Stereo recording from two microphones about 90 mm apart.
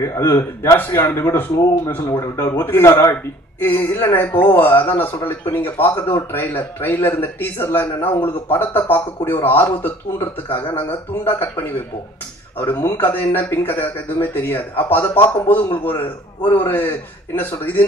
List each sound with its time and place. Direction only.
0.0 s a man's voice: 30° left (ahead or behind)
3.6 s speech: 25° left (ahead or behind)